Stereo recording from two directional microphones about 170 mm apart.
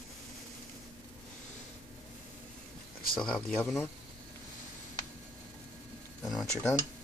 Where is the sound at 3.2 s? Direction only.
5° left (ahead or behind).